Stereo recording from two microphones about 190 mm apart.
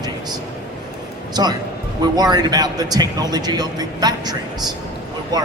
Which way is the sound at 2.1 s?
20° right (ahead or behind).